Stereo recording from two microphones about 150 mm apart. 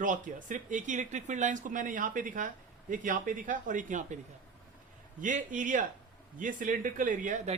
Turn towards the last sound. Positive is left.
turn(degrees=-55)  # may be behind; listen again after turning